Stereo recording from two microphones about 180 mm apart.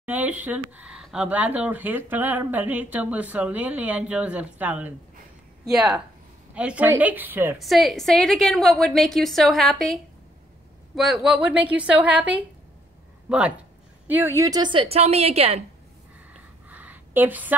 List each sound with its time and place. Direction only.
0.0 s speech: 10° right (ahead or behind)
6.5 s speech: 5° right (ahead or behind)
7.5 s a woman's voice: centre (ahead or behind)
11.0 s a woman's voice: centre (ahead or behind); by 15.6 s 35° right (ahead or behind)
16.6 s a sound: 10° right (ahead or behind)